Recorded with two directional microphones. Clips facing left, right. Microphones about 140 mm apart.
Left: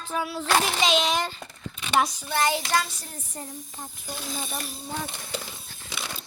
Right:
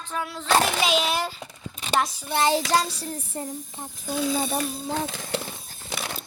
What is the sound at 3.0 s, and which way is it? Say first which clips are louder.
Speech: right 8 dB; 35° right (ahead or behind).